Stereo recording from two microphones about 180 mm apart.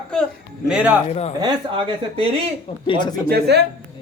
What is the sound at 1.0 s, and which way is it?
Speech, 35° left (ahead or behind).